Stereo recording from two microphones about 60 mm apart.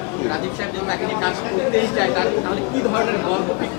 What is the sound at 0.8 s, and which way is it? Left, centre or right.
Speech, left.